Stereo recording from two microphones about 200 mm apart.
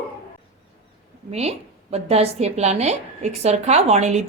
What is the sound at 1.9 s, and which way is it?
A woman's voice, 30° right (ahead or behind).